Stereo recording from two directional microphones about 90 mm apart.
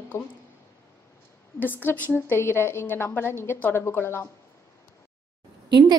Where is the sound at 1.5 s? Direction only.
20° left (ahead or behind).